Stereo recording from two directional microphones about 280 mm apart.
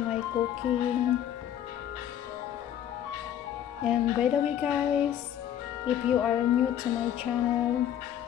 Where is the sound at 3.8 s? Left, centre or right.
Centre.